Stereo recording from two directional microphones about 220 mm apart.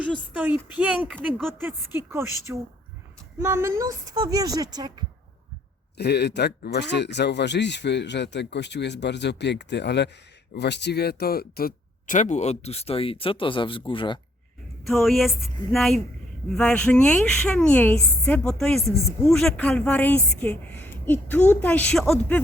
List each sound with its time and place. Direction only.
0.0 s a woman's voice: 5° right (ahead or behind)
6.0 s speech: 50° left (ahead or behind); by 14.2 s 25° left (ahead or behind)
14.8 s a woman's voice: centre (ahead or behind)